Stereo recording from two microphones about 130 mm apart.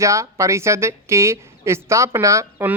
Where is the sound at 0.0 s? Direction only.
25° right (ahead or behind).